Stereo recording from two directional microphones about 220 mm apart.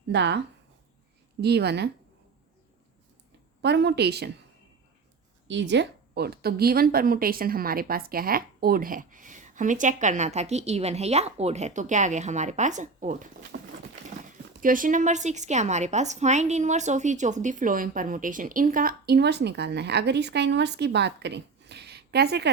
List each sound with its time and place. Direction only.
0.1 s a woman's voice: 50° right (ahead or behind)
3.6 s a woman's voice: 50° right (ahead or behind)
5.5 s a woman's voice: 55° right (ahead or behind); by 13.2 s 35° right (ahead or behind)
13.5 s a sound: 50° right (ahead or behind)
14.6 s a woman's voice: 40° right (ahead or behind)